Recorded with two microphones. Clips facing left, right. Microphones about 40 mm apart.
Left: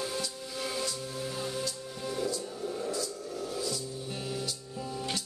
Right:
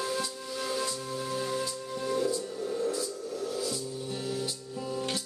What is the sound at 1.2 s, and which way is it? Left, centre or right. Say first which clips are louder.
Music: right 3 dB; centre.